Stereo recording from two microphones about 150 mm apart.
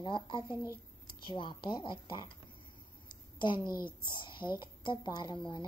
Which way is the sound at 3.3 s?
30° left (ahead or behind).